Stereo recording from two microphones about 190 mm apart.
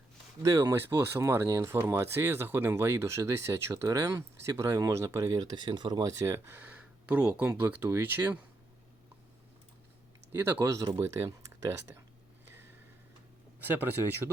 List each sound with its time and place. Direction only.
0.4 s speech: 15° right (ahead or behind)
10.4 s speech: 15° right (ahead or behind)